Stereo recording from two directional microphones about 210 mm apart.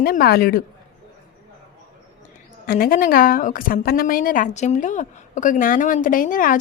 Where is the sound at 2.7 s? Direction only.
45° left (ahead or behind).